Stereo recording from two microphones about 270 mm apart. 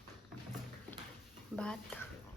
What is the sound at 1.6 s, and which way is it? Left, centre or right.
Speech, centre.